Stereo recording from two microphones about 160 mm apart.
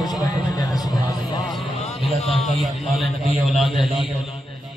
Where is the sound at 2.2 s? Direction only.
40° left (ahead or behind).